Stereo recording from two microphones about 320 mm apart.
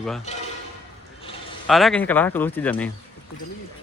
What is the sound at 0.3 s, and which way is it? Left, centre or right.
Speech, left.